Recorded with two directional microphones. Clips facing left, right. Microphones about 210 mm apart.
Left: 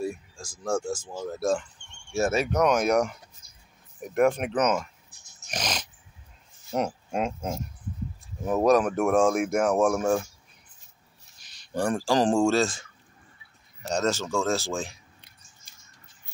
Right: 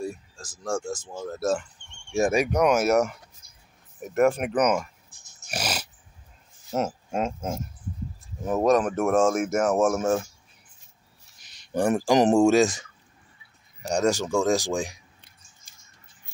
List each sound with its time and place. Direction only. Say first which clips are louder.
0.0 s speech: left 1 dB; 10° left (ahead or behind)
2.1 s speech: right 2 dB; 15° right (ahead or behind)
5.5 s a sound: right 1 dB; 10° right (ahead or behind)
6.7 s speech: right 1 dB; 5° right (ahead or behind)
11.4 s speech: right 3 dB; 20° right (ahead or behind)
13.8 s speech: right 3 dB; 15° right (ahead or behind)